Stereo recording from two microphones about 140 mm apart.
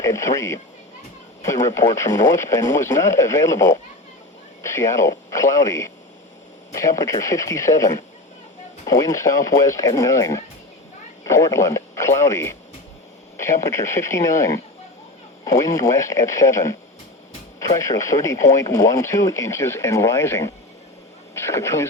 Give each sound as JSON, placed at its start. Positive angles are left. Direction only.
{"t": 0.0, "sound": "speech", "side_deg": 20}